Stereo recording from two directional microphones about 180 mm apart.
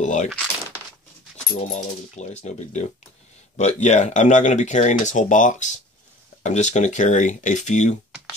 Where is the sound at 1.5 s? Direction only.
40° left (ahead or behind).